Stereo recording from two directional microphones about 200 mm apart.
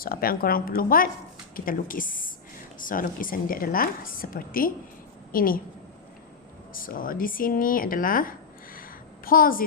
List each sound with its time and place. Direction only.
0.0 s a woman's voice: 45° left (ahead or behind)
6.7 s speech: 45° left (ahead or behind)